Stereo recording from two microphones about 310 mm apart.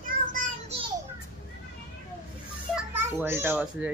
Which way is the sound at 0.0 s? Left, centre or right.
Right.